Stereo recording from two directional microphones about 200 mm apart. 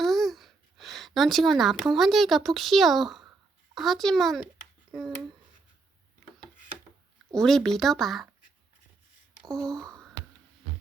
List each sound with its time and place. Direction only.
0.0 s speech: centre (ahead or behind)
7.3 s speech: centre (ahead or behind)
9.4 s a sound: 15° right (ahead or behind)